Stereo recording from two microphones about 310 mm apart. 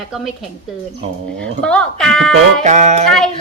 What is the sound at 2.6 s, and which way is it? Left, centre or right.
Speech, right.